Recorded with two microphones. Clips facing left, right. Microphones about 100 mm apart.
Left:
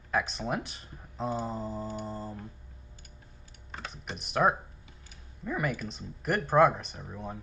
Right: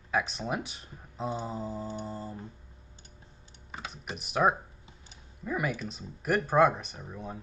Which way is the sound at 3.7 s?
Centre (ahead or behind).